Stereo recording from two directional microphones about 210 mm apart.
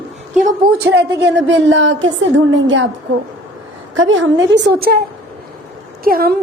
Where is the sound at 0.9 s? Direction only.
60° right (ahead or behind).